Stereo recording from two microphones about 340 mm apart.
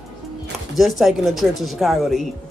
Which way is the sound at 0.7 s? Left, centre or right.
Centre.